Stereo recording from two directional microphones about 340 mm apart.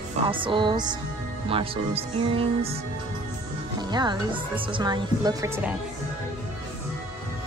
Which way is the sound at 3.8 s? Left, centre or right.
Centre.